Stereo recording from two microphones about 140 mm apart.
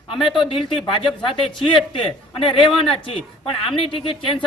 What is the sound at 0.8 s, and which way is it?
Speech, 40° left (ahead or behind).